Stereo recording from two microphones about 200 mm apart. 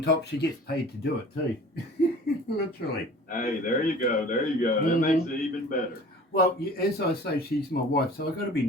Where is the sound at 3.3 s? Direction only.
40° left (ahead or behind).